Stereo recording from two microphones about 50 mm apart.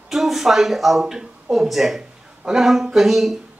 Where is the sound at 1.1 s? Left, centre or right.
Centre.